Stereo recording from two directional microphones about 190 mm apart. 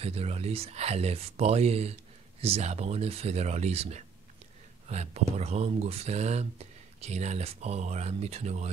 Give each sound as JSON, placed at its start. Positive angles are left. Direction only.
{"t": 0.0, "sound": "speech", "side_deg": -30}